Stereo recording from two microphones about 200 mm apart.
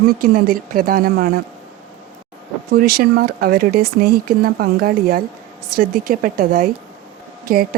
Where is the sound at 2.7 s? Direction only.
45° right (ahead or behind).